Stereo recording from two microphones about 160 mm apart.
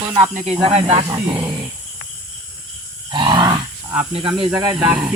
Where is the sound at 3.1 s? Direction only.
30° right (ahead or behind).